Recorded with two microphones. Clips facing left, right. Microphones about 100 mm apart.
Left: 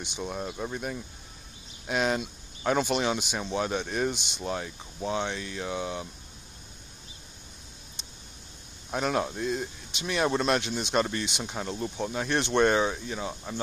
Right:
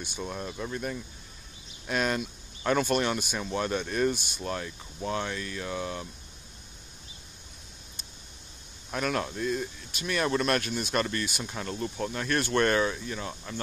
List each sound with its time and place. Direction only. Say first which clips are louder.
0.2 s speech: left 2 dB; 10° left (ahead or behind)
8.9 s speech: left 2 dB; 20° left (ahead or behind)